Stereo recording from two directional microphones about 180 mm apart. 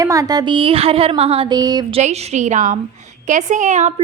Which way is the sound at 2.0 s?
40° right (ahead or behind).